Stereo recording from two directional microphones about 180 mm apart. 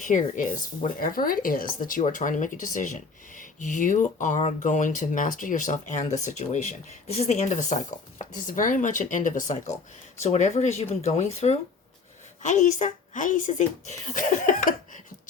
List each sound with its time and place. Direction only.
0.0 s speech: 45° left (ahead or behind)